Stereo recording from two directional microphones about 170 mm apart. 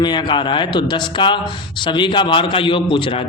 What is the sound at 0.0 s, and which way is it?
A man's voice, 25° left (ahead or behind).